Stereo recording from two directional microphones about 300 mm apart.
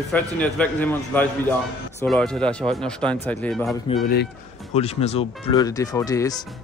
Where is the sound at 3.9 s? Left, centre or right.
Left.